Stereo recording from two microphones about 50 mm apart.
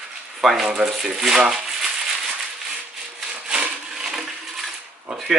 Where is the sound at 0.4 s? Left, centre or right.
Centre.